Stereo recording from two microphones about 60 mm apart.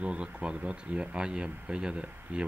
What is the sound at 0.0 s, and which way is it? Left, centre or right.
Speech, centre.